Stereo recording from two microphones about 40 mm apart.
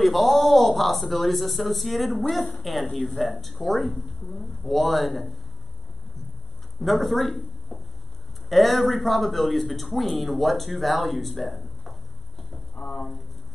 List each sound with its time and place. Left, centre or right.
0.0 s speech: centre
6.8 s a man's voice: centre
12.7 s a sound: centre